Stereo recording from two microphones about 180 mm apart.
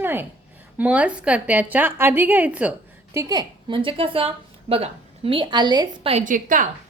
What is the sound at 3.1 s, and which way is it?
A woman's voice, 20° right (ahead or behind).